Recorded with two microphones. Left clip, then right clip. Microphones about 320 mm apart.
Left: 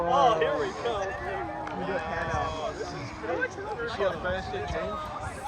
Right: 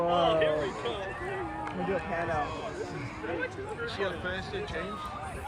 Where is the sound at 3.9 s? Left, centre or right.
Left.